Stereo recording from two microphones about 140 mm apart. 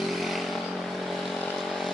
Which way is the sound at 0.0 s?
Centre (ahead or behind).